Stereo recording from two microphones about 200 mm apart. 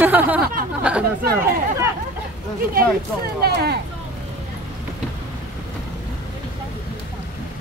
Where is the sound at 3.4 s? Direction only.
55° right (ahead or behind).